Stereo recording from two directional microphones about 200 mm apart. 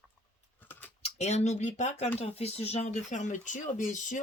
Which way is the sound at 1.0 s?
35° left (ahead or behind).